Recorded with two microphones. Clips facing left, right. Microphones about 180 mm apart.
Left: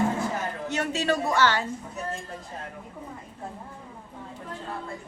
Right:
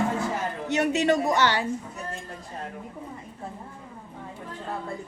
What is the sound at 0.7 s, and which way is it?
Speech, 15° right (ahead or behind).